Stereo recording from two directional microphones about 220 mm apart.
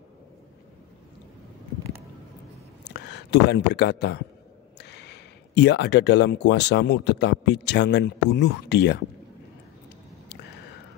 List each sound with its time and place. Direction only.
2.8 s speech: 50° left (ahead or behind)